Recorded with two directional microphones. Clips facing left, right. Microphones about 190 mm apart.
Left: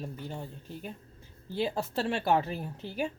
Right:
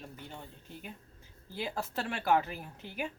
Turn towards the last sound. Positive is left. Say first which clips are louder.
# left 6 dB
turn(degrees=30)  # may be behind; listen again after turning